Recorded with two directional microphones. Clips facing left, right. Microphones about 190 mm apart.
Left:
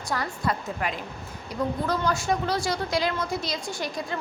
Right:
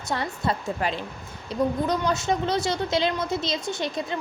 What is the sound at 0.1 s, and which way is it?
A woman's voice, 25° right (ahead or behind).